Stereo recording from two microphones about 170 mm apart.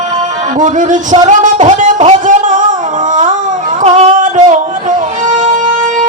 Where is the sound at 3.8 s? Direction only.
45° right (ahead or behind).